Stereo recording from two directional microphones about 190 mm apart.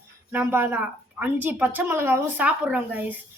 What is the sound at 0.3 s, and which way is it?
A woman's voice, 10° right (ahead or behind).